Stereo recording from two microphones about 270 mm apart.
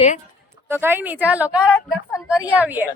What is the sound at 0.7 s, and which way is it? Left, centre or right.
Speech, centre.